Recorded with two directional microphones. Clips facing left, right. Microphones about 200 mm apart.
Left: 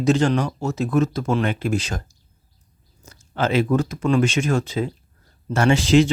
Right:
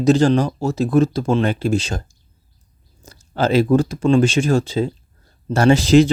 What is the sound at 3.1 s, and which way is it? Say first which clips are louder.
Speech: right 4 dB; 35° right (ahead or behind).